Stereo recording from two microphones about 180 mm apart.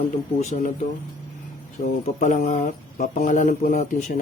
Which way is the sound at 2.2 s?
45° left (ahead or behind).